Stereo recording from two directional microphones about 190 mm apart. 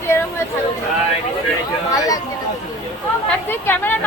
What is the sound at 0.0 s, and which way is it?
Chatter, 10° left (ahead or behind).